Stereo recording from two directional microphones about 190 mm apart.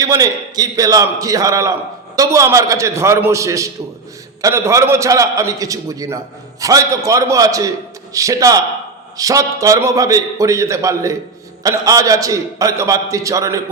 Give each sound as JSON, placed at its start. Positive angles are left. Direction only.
{"t": 0.0, "sound": "a man's voice", "side_deg": -20}